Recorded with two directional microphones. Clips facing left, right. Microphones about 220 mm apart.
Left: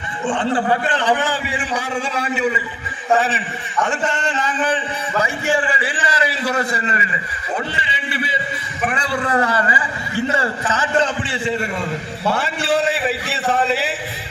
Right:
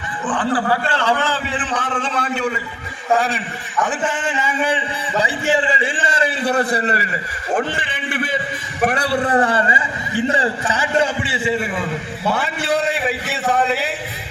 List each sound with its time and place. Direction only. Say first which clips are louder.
0.3 s a man's voice: left 1 dB; 25° left (ahead or behind); by 6.9 s 35° right (ahead or behind)
7.5 s a sound: right 4 dB; 50° right (ahead or behind)
8.8 s a man's voice: right 4 dB; 35° right (ahead or behind); by 13.9 s centre (ahead or behind)